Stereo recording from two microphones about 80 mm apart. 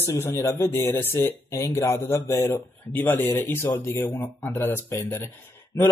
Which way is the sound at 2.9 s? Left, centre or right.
Left.